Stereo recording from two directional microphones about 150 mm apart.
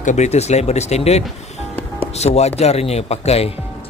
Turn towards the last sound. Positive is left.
turn(degrees=45)  # may be behind; listen again after turning